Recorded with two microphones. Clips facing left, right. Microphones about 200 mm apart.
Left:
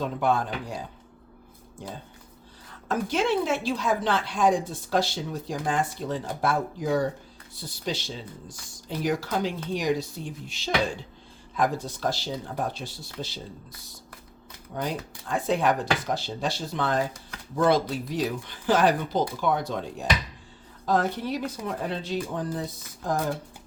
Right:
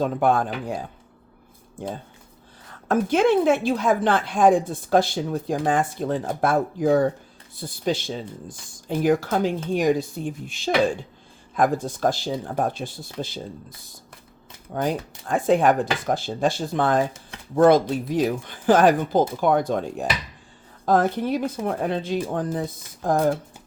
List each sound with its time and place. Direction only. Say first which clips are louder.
0.0 s a woman's voice: right 5 dB; 50° right (ahead or behind)
2.9 s a woman's voice: right 7 dB; 50° right (ahead or behind)
14.8 s a woman's voice: right 6 dB; 50° right (ahead or behind)